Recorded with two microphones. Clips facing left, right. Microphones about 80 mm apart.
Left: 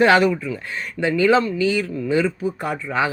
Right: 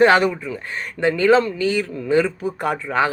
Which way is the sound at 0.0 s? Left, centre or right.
Right.